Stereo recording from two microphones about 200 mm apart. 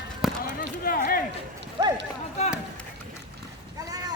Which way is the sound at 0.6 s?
45° left (ahead or behind).